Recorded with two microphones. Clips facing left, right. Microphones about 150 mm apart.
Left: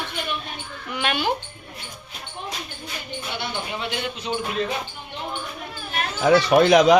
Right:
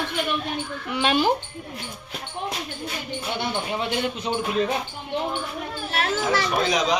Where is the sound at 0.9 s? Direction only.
30° right (ahead or behind).